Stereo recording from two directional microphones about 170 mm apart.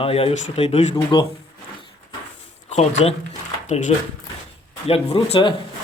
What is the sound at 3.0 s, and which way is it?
Speech, 40° left (ahead or behind).